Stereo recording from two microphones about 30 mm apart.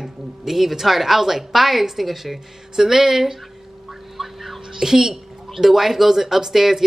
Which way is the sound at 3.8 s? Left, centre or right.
Centre.